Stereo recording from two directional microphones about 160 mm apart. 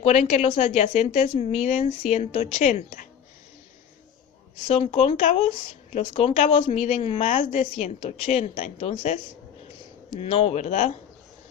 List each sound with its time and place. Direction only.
0.0 s a woman's voice: 45° left (ahead or behind)
4.7 s a woman's voice: 40° left (ahead or behind)
10.2 s a woman's voice: 35° left (ahead or behind)